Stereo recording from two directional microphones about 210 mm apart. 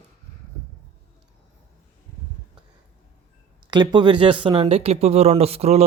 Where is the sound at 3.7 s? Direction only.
20° right (ahead or behind).